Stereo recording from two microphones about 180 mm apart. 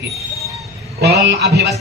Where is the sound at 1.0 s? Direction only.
65° right (ahead or behind).